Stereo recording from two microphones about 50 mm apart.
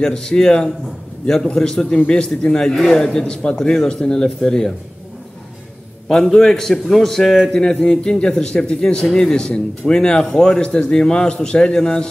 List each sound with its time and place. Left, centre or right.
0.0 s speech: centre
6.0 s speech: centre